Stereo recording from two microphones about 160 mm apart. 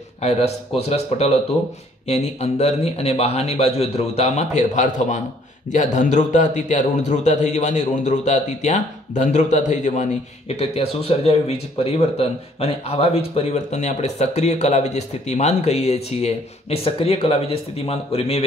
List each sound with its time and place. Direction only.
0.2 s a man's voice: 40° left (ahead or behind)
10.5 s speech: 40° left (ahead or behind)